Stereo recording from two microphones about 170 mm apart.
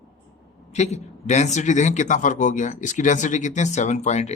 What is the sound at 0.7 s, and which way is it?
Speech, 40° left (ahead or behind).